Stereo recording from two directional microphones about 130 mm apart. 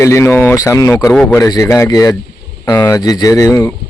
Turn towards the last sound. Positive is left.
turn(degrees=25)  # may be behind; listen again after turning